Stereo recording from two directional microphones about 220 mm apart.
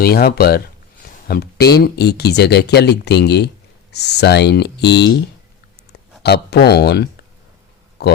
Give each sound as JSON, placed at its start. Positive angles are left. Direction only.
{"t": 0.0, "sound": "speech", "side_deg": 40}